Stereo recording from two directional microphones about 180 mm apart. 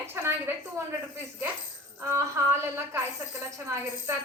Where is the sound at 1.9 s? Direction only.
15° right (ahead or behind).